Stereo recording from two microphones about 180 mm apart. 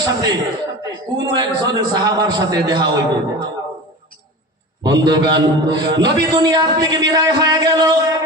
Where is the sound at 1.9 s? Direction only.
20° right (ahead or behind).